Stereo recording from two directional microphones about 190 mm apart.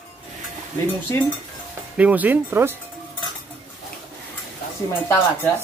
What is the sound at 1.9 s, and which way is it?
Speech, 10° right (ahead or behind).